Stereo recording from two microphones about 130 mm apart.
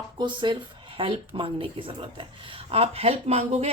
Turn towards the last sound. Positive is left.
turn(degrees=-55)  # may be behind; listen again after turning